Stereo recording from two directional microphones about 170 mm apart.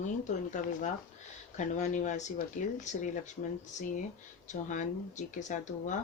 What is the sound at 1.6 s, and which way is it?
Speech, 45° left (ahead or behind).